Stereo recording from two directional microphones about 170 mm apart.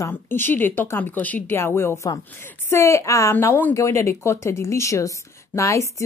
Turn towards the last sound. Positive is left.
turn(degrees=15)  # may be behind; listen again after turning